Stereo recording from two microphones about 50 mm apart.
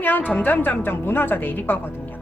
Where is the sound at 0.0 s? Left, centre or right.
Left.